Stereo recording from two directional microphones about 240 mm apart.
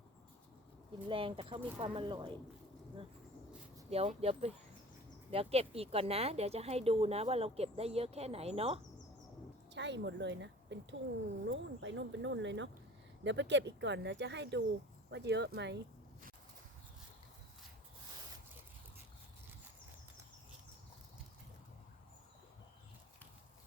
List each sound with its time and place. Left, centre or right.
1.0 s speech: right
3.8 s speech: right
9.7 s speech: right